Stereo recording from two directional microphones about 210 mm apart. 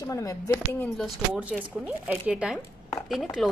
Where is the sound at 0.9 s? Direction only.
Centre (ahead or behind).